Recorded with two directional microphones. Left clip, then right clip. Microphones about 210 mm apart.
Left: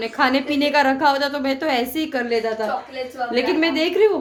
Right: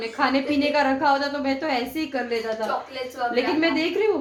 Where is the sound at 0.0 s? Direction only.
45° left (ahead or behind).